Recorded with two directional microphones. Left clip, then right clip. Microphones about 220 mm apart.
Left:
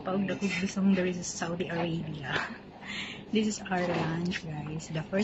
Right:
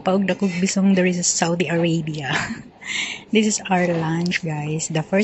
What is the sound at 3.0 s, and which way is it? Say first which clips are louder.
Speech: right 11 dB; 25° right (ahead or behind).